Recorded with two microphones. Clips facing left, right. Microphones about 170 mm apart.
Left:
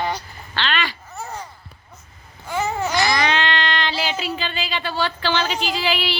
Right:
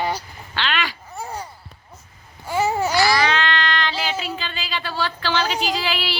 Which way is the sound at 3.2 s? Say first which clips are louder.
Even; 25° left (ahead or behind).